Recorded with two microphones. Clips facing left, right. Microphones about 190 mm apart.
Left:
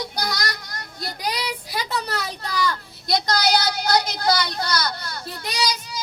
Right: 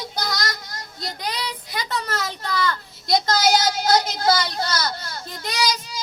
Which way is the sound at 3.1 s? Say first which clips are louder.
Right 2 dB; 20° right (ahead or behind).